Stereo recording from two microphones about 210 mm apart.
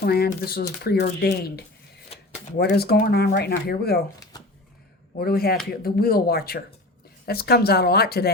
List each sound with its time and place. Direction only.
0.0 s speech: 45° left (ahead or behind)
2.1 s a sound: 30° left (ahead or behind)
2.6 s speech: 50° left (ahead or behind)
4.2 s shuffling cards: 20° left (ahead or behind)
5.2 s speech: 45° left (ahead or behind)